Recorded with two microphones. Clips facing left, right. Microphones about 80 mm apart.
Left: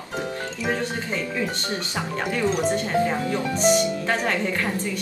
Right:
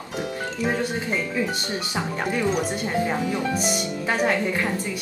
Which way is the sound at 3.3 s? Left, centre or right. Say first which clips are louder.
Left 4 dB; centre.